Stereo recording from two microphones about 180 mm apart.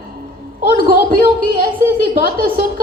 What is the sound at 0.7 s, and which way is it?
A woman's voice, 55° right (ahead or behind).